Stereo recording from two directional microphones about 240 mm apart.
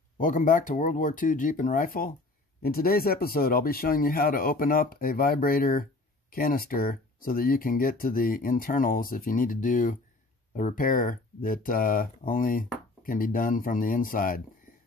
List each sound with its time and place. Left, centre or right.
0.2 s speech: left